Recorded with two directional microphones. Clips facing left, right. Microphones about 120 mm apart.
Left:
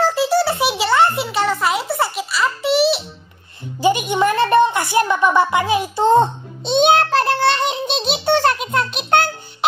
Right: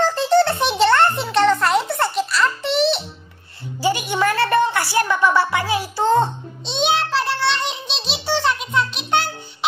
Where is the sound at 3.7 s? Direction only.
20° left (ahead or behind).